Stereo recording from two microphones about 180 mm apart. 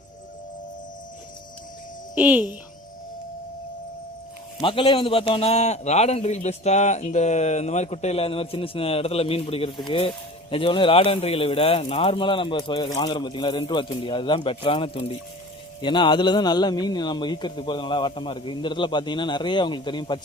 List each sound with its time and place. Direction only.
2.1 s a child's voice: 10° right (ahead or behind)
4.6 s a man's voice: 30° left (ahead or behind)